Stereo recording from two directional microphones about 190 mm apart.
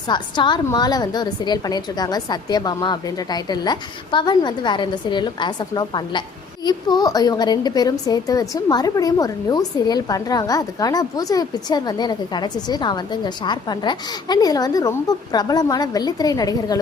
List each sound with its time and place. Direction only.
0.1 s a woman's voice: 25° left (ahead or behind)